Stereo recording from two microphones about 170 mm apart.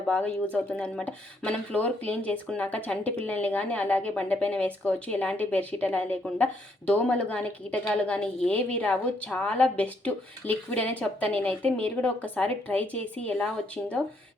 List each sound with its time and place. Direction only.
0.1 s a woman's voice: 10° left (ahead or behind)